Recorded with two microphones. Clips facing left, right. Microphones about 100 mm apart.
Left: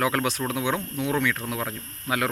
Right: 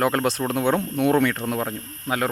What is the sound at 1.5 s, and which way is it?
Speech, 35° right (ahead or behind).